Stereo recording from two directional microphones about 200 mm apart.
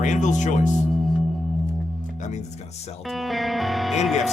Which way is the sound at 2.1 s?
35° left (ahead or behind).